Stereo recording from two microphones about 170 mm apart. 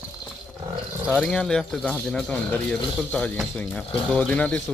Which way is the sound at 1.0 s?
Centre (ahead or behind).